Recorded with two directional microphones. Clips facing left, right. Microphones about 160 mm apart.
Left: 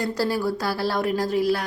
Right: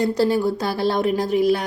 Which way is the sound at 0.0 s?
20° right (ahead or behind).